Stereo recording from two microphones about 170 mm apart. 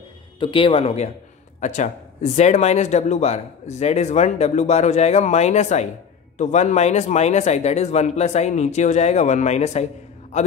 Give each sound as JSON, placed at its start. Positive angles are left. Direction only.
{"t": 0.4, "sound": "speech", "side_deg": 30}